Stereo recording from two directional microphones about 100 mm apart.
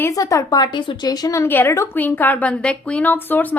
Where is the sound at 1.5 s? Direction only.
20° left (ahead or behind).